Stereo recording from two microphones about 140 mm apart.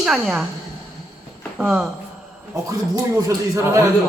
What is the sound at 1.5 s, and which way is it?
Speech, 5° right (ahead or behind).